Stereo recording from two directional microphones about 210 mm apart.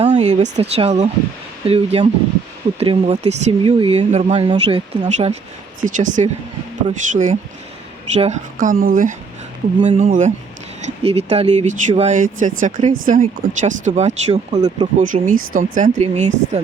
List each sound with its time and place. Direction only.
0.0 s a sound: 35° right (ahead or behind)
0.5 s speech: 30° right (ahead or behind)
9.8 s speech: 25° right (ahead or behind)
10.1 s speech: 40° right (ahead or behind)